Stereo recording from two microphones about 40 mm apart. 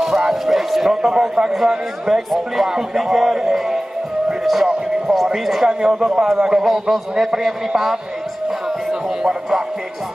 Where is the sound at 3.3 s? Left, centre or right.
Centre.